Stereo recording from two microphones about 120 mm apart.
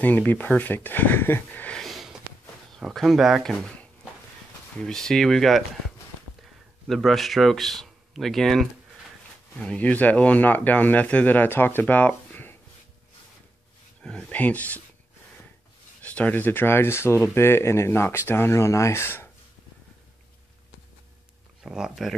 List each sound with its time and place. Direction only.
0.0 s speech: 15° left (ahead or behind)
1.8 s sniff: centre (ahead or behind)
2.8 s speech: centre (ahead or behind)
4.7 s speech: 5° left (ahead or behind)
6.9 s speech: centre (ahead or behind)
14.0 s speech: 10° left (ahead or behind)
16.0 s speech: 10° left (ahead or behind)
21.6 s speech: 5° right (ahead or behind)